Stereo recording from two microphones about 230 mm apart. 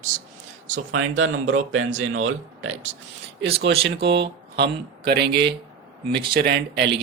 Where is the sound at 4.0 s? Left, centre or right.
Right.